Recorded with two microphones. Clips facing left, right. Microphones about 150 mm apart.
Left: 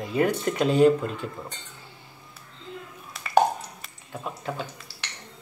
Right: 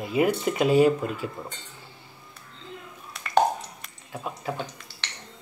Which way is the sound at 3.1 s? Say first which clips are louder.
Left 1 dB; 5° left (ahead or behind).